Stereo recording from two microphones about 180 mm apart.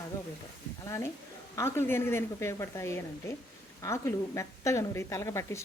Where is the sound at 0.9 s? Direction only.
15° left (ahead or behind).